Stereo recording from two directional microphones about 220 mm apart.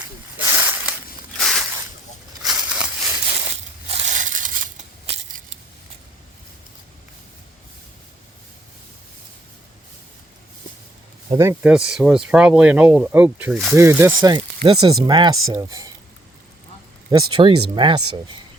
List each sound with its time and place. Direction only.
0.3 s a sound: 10° right (ahead or behind)
1.4 s a sound: centre (ahead or behind)
3.8 s crushing: 30° right (ahead or behind)
11.3 s speech: 15° right (ahead or behind)
13.7 s speech: 10° right (ahead or behind)
17.1 s speech: 20° right (ahead or behind)